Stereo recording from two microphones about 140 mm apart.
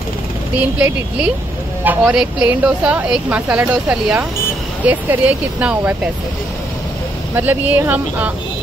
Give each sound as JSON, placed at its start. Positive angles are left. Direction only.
{"t": 0.7, "sound": "speech", "side_deg": -10}
{"t": 7.3, "sound": "speech", "side_deg": -10}